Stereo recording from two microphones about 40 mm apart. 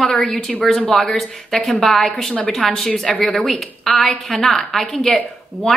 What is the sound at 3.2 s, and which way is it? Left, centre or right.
A woman's voice, centre.